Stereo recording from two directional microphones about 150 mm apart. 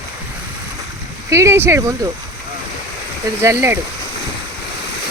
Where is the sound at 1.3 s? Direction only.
20° right (ahead or behind).